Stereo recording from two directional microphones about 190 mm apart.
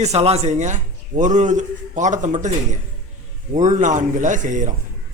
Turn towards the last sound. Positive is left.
turn(degrees=-40)  # may be behind; listen again after turning